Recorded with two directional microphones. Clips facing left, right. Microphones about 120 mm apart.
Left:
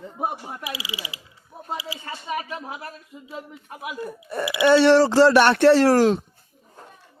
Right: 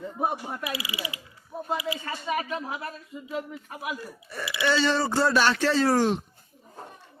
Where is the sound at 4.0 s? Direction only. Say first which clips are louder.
Left 9 dB; 50° left (ahead or behind); by 6.0 s 85° left.